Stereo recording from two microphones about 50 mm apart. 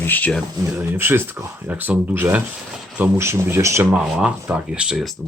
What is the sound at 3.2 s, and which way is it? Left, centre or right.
Speech, right.